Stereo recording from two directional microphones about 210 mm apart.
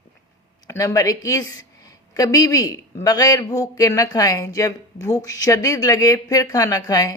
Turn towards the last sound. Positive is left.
turn(degrees=15)  # may be behind; listen again after turning